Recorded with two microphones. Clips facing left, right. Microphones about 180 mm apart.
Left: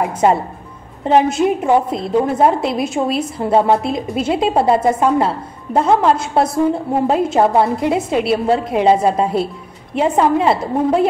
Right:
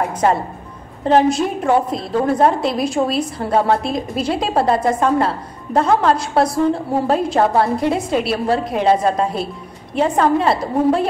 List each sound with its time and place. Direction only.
0.0 s a woman's voice: 20° left (ahead or behind)